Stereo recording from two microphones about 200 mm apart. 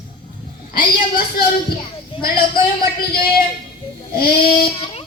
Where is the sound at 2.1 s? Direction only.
25° left (ahead or behind).